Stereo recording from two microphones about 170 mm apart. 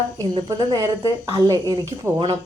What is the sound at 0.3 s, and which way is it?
Speech, 25° right (ahead or behind).